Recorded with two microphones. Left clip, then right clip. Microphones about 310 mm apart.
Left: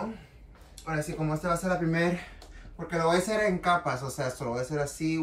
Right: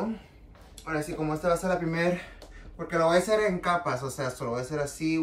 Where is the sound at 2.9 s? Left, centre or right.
Centre.